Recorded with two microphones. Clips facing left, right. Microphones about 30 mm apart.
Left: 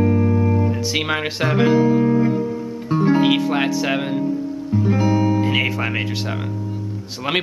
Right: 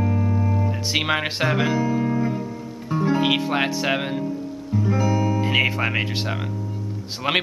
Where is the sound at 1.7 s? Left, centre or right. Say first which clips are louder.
Left 6 dB; left.